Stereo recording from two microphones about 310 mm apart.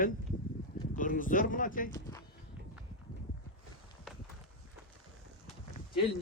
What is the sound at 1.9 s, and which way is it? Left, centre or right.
Speech, centre.